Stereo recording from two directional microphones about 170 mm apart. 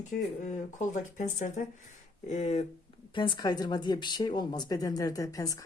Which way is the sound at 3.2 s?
25° left (ahead or behind).